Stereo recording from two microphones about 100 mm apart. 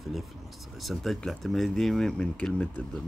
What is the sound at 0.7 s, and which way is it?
Speech, centre (ahead or behind).